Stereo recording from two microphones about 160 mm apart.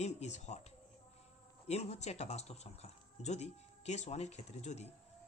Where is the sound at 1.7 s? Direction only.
45° left (ahead or behind).